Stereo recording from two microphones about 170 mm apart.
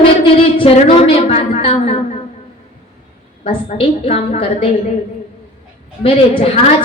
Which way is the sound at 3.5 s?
30° left (ahead or behind).